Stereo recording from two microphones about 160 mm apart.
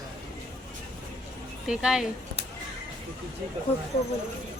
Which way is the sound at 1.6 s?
5° right (ahead or behind).